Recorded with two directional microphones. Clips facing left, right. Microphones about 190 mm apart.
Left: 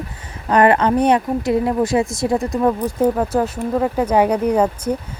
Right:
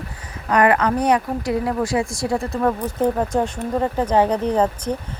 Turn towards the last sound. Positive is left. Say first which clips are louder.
# left 3 dB
turn(degrees=10)  # may be behind; listen again after turning